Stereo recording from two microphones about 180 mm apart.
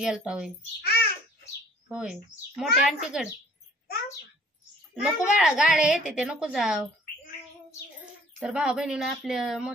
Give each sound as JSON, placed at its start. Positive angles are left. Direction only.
{"t": 0.0, "sound": "a woman's voice", "side_deg": -5}
{"t": 0.7, "sound": "a sound", "side_deg": 60}
{"t": 1.9, "sound": "a woman's voice", "side_deg": -5}
{"t": 5.0, "sound": "a woman's voice", "side_deg": 0}
{"t": 8.4, "sound": "a woman's voice", "side_deg": -5}